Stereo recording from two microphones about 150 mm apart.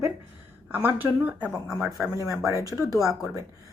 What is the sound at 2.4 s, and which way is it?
Speech, 20° right (ahead or behind).